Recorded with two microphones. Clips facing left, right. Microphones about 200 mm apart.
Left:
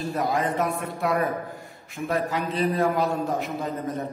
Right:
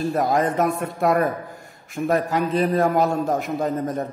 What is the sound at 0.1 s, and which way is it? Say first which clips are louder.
A man's voice: right 2 dB; 45° right (ahead or behind).